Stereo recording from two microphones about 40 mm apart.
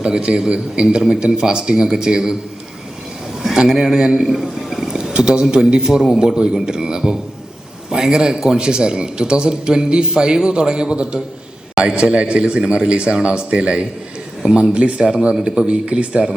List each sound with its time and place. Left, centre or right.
0.0 s a man's voice: right
3.6 s a man's voice: right